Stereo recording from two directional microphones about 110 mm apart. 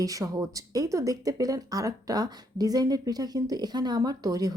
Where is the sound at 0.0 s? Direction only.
30° right (ahead or behind).